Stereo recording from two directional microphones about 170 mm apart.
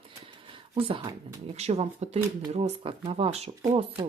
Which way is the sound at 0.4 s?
30° right (ahead or behind).